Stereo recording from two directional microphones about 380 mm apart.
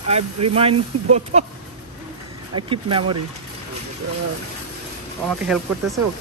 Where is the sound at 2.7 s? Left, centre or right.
Centre.